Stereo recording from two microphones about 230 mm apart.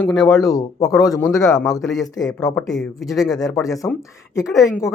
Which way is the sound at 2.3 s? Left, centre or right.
Centre.